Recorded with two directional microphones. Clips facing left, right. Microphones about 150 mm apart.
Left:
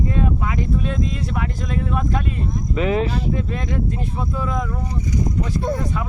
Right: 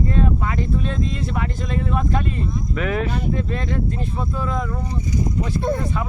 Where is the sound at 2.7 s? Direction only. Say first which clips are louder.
Left 4 dB; 25° left (ahead or behind).